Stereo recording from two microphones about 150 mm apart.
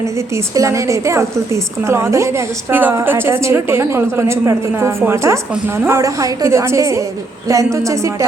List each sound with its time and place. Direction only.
0.5 s a woman's voice: 20° right (ahead or behind)